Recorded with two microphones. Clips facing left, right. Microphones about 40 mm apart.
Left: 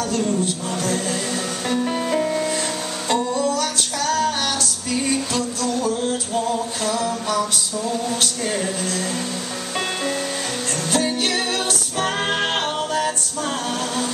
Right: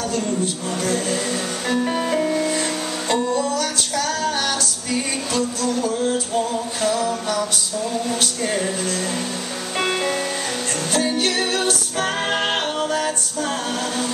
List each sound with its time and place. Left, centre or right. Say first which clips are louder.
0.7 s music: right 2 dB; centre
6.9 s music: even; centre
8.1 s a sound: right 1 dB; centre
11.0 s music: right 1 dB; centre